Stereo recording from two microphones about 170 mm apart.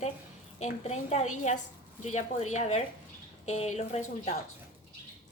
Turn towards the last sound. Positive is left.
turn(degrees=40)  # may be behind; listen again after turning